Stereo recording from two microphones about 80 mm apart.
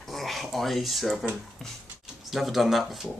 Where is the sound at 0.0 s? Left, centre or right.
Centre.